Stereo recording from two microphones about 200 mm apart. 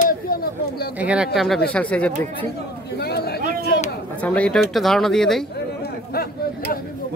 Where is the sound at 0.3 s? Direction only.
50° left (ahead or behind).